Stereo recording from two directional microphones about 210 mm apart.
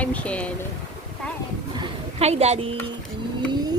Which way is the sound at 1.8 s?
30° right (ahead or behind).